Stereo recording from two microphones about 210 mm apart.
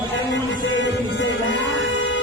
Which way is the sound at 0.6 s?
60° left (ahead or behind).